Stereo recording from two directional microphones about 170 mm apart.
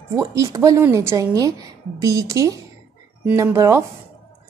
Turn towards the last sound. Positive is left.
turn(degrees=-15)  # may be behind; listen again after turning